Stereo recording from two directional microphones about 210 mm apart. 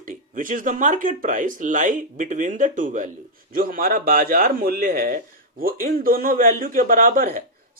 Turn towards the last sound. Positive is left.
turn(degrees=-40)  # may be behind; listen again after turning